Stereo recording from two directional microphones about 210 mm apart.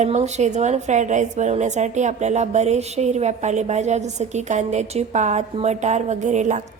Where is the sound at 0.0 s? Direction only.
35° right (ahead or behind).